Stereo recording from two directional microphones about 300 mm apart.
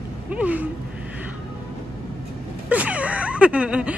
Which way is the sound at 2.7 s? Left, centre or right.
Centre.